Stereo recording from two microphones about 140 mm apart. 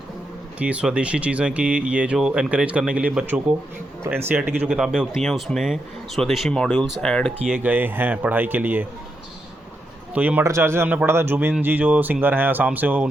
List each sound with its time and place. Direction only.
0.6 s speech: 10° right (ahead or behind)
7.4 s speech: 10° right (ahead or behind)
10.2 s speech: 10° right (ahead or behind)